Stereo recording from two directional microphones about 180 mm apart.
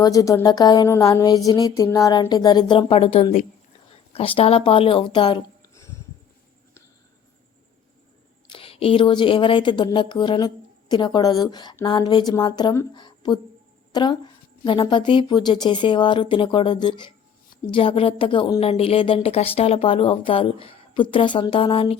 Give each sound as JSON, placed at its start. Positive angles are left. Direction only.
{"t": 0.0, "sound": "speech", "side_deg": 20}
{"t": 8.4, "sound": "speech", "side_deg": 30}